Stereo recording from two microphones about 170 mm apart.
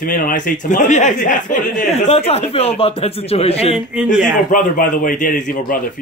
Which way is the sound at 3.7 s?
5° right (ahead or behind).